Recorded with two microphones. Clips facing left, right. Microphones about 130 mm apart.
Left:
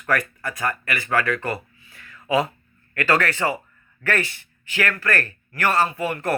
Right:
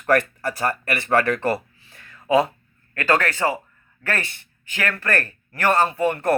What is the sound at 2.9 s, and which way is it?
Speech, 25° right (ahead or behind).